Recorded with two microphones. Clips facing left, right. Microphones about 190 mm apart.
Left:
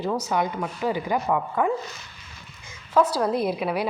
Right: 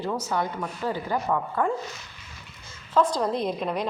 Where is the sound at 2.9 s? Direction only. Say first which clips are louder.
Left 2 dB; 10° left (ahead or behind).